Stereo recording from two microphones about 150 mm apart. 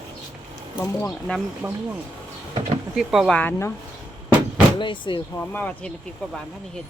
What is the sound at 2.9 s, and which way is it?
Speech, centre (ahead or behind).